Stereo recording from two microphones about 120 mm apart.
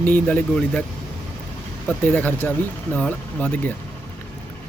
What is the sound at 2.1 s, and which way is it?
Speech, 15° left (ahead or behind).